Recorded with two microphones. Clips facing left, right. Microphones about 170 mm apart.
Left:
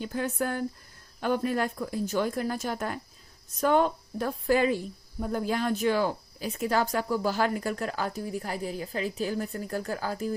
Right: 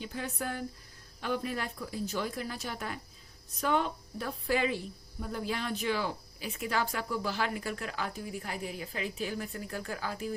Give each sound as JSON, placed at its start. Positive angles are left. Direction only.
{"t": 0.0, "sound": "speech", "side_deg": 50}